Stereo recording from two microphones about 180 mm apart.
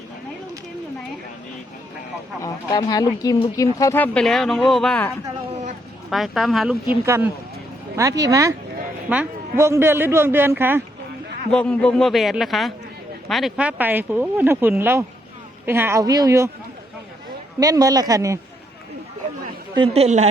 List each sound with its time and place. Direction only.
2.4 s a man's voice: 20° left (ahead or behind); by 6.7 s centre (ahead or behind)
7.0 s a man's voice: 15° right (ahead or behind)
11.5 s a man's voice: 5° left (ahead or behind); by 16.5 s 20° right (ahead or behind)
17.6 s speech: 20° right (ahead or behind)
19.7 s a woman's voice: 30° right (ahead or behind)